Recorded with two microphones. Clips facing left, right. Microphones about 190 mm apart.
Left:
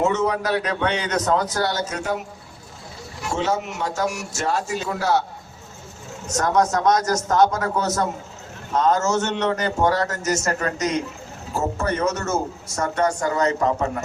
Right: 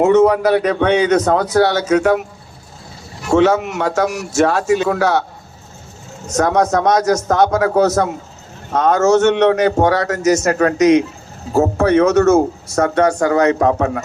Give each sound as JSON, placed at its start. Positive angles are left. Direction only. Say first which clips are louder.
{"t": 0.0, "sound": "a man's voice", "louder": "right 10 dB", "side_deg": -60}
{"t": 3.2, "sound": "a man's voice", "louder": "right 11 dB", "side_deg": -70}
{"t": 6.3, "sound": "a man's voice", "louder": "right 5 dB", "side_deg": -60}